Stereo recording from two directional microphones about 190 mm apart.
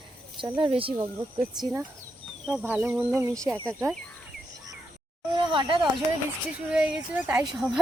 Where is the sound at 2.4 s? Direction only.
5° right (ahead or behind).